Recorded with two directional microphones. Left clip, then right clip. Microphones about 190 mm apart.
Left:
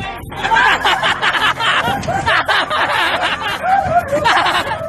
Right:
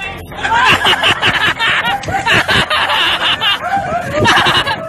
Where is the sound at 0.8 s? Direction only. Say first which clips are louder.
Right 3 dB; 15° left (ahead or behind).